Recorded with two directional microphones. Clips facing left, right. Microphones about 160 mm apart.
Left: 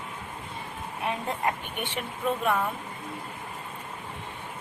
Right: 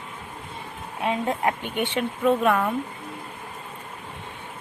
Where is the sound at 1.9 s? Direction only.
75° right (ahead or behind).